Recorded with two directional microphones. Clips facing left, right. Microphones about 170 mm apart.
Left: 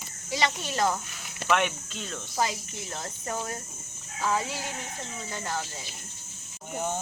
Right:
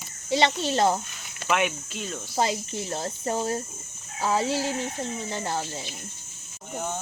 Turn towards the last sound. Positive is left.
turn(degrees=10)  # may be behind; listen again after turning